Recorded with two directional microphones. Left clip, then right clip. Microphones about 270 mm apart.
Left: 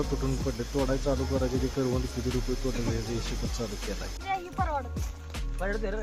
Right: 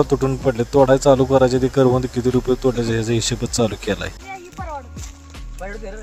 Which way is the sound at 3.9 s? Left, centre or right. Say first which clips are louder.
Right 15 dB; right.